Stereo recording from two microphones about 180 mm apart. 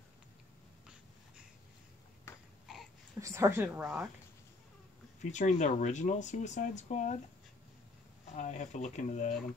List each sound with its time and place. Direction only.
3.2 s a woman's voice: 15° right (ahead or behind)
5.2 s speech: 40° left (ahead or behind)
8.4 s speech: 40° left (ahead or behind)